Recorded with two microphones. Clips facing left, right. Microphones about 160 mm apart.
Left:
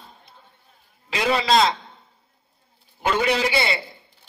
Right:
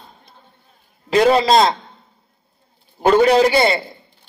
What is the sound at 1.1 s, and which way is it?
Speech, 40° right (ahead or behind).